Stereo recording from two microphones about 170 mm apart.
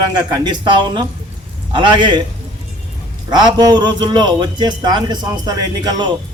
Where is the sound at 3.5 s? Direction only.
25° right (ahead or behind).